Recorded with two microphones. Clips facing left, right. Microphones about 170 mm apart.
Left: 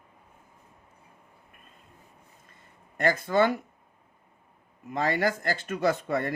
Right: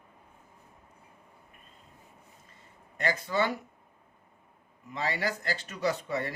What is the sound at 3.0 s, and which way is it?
Speech, 50° left (ahead or behind).